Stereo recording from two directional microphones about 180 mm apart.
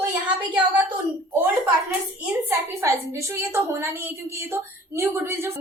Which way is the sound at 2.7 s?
15° right (ahead or behind).